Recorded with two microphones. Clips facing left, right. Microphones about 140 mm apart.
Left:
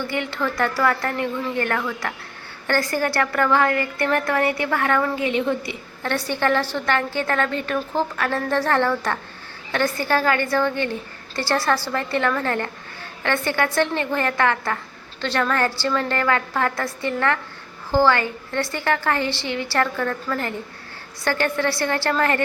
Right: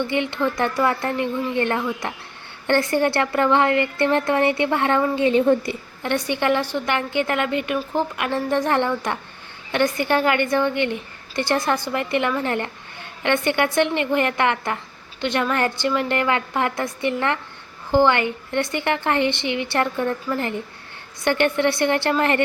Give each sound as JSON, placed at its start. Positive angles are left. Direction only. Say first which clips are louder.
{"t": 0.0, "sound": "a woman's voice", "louder": "right 3 dB", "side_deg": -20}
{"t": 6.0, "sound": "a woman's voice", "louder": "even", "side_deg": -15}